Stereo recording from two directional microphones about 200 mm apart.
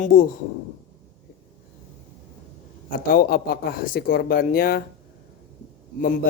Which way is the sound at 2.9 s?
45° left (ahead or behind).